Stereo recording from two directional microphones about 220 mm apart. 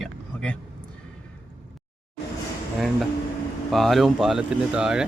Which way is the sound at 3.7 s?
Centre (ahead or behind).